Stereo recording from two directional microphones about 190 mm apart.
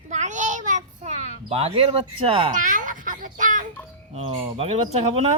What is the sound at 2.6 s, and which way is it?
A child's voice, 45° right (ahead or behind).